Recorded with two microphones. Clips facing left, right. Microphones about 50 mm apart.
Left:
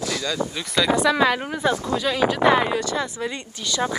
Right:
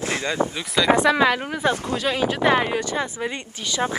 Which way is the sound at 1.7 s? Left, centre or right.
Right.